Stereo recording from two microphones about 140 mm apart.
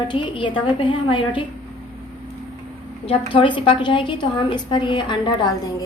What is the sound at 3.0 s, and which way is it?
A woman's voice, 40° left (ahead or behind).